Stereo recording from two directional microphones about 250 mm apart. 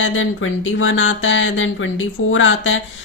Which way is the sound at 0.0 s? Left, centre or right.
Left.